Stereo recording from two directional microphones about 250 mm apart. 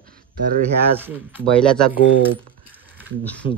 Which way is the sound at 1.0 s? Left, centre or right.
Centre.